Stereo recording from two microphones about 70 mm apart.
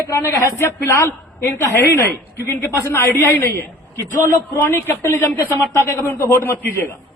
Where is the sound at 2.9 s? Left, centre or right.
Left.